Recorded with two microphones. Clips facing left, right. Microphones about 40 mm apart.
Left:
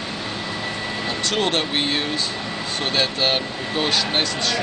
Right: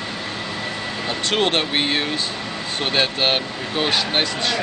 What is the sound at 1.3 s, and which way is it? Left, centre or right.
Speech, right.